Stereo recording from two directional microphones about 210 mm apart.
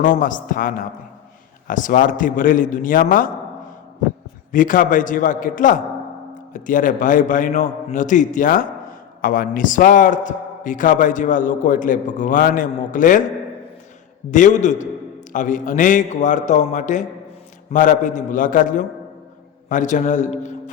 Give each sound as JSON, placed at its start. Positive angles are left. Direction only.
{"t": 0.0, "sound": "a man's voice", "side_deg": 40}
{"t": 4.5, "sound": "a man's voice", "side_deg": 40}
{"t": 14.3, "sound": "a man's voice", "side_deg": 35}